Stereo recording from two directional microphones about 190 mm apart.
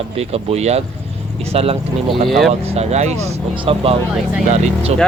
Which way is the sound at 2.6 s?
35° right (ahead or behind).